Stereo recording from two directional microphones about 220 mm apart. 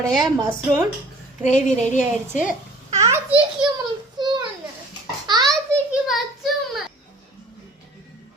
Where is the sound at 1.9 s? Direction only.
35° left (ahead or behind).